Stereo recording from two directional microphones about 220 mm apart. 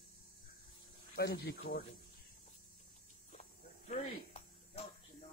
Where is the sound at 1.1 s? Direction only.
45° left (ahead or behind).